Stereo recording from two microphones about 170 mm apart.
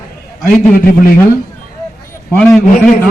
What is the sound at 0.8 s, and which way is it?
Speech, 60° left (ahead or behind).